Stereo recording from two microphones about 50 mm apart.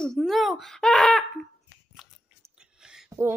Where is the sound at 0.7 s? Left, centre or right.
Centre.